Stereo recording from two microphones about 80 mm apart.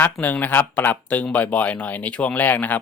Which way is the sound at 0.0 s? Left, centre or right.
Left.